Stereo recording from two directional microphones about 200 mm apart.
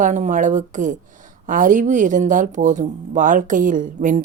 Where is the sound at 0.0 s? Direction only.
40° right (ahead or behind).